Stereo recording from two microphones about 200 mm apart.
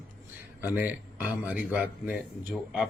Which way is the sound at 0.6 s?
10° right (ahead or behind).